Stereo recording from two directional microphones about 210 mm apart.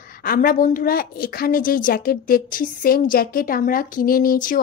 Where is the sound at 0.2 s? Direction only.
45° left (ahead or behind).